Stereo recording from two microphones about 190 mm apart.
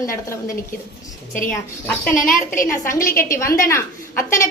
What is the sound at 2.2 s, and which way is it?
Speech, 45° left (ahead or behind).